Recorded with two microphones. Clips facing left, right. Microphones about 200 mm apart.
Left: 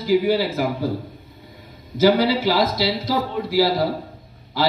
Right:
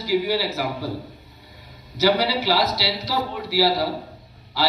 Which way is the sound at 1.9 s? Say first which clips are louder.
Left 4 dB; 50° left (ahead or behind).